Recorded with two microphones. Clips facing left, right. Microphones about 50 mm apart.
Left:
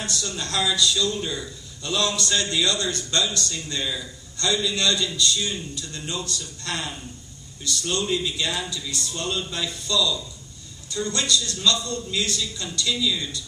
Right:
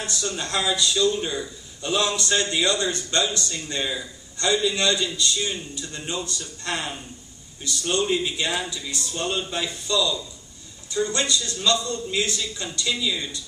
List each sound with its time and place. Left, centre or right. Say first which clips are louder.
0.0 s a man's voice: right 1 dB; right